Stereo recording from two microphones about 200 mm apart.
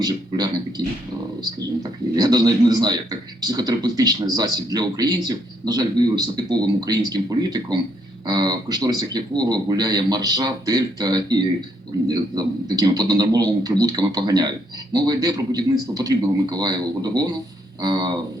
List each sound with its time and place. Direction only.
0.0 s speech: 20° right (ahead or behind)